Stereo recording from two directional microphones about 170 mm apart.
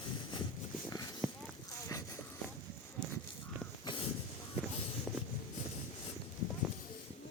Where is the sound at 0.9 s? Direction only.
20° left (ahead or behind).